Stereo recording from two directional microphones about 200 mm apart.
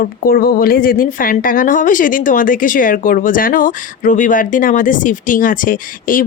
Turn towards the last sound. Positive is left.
turn(degrees=45)  # may be behind; listen again after turning